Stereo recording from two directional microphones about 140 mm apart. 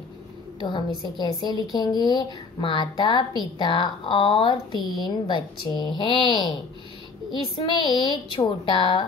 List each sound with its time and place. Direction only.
0.6 s a woman's voice: 35° left (ahead or behind)
7.5 s a woman's voice: 35° left (ahead or behind)